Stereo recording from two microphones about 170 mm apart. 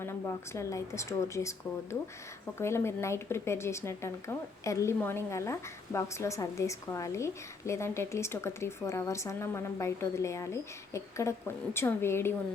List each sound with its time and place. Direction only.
0.0 s speech: 15° left (ahead or behind)